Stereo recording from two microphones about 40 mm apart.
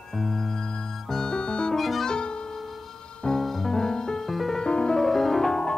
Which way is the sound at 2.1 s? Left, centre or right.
Left.